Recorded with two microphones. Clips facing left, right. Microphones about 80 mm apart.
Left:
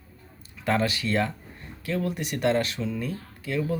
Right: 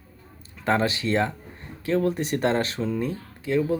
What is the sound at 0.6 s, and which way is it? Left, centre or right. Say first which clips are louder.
Speech: right 2 dB; right.